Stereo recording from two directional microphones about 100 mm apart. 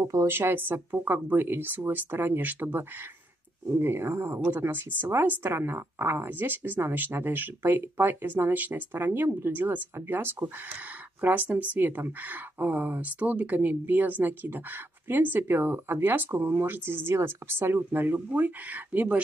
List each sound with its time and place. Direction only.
0.1 s speech: 25° right (ahead or behind)